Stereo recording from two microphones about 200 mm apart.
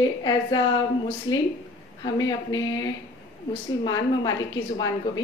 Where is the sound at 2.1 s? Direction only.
20° left (ahead or behind).